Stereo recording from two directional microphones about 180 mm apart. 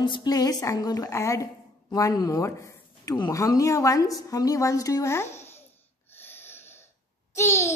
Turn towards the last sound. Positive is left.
turn(degrees=15)  # may be behind; listen again after turning